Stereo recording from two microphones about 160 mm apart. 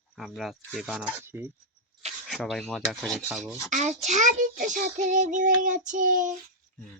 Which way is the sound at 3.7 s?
45° right (ahead or behind).